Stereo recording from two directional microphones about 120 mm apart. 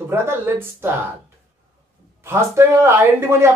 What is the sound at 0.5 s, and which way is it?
Speech, 20° right (ahead or behind).